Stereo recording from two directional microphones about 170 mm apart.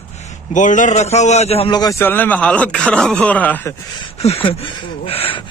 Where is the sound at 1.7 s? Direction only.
25° left (ahead or behind).